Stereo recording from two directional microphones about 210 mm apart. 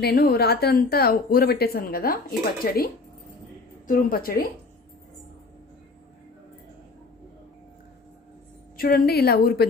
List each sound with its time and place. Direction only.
0.0 s a woman's voice: 45° left (ahead or behind)
8.7 s a woman's voice: 45° left (ahead or behind)